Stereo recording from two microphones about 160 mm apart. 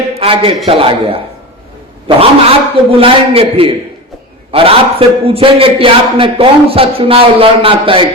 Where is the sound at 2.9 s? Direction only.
35° right (ahead or behind).